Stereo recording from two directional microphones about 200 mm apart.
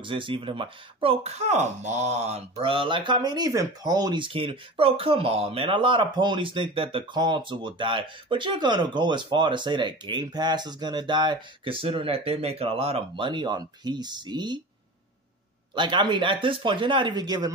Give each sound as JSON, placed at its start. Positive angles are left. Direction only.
{"t": 0.0, "sound": "speech", "side_deg": -25}
{"t": 15.7, "sound": "speech", "side_deg": -25}